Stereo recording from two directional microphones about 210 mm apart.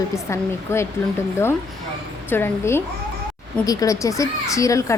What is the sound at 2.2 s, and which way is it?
A woman's voice, 10° left (ahead or behind).